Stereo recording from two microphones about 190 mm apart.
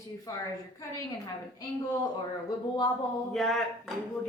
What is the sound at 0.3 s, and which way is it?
Speech, 15° left (ahead or behind).